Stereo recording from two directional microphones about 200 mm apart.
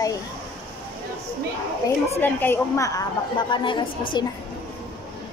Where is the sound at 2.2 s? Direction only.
10° left (ahead or behind).